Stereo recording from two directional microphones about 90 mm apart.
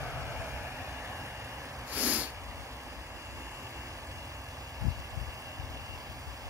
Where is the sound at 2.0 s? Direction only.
15° right (ahead or behind).